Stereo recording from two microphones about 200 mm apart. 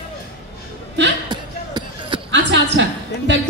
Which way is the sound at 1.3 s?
20° right (ahead or behind).